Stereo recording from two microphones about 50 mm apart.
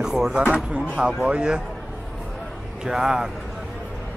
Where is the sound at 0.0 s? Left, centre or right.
Centre.